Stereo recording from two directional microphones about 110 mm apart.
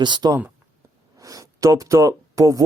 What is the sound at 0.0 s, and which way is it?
A man's voice, 40° right (ahead or behind).